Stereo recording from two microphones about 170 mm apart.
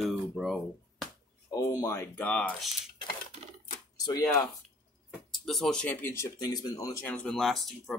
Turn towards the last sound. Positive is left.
turn(degrees=0)  # may be behind; listen again after turning